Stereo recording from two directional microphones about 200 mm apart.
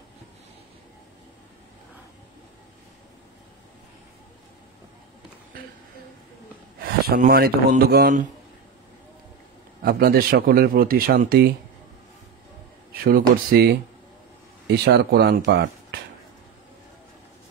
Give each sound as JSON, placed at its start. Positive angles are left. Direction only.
{"t": 6.8, "sound": "speech", "side_deg": -50}
{"t": 9.8, "sound": "speech", "side_deg": -50}
{"t": 13.0, "sound": "speech", "side_deg": -50}